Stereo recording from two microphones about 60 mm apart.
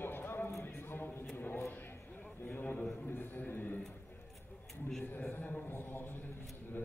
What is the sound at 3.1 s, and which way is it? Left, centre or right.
Speech, left.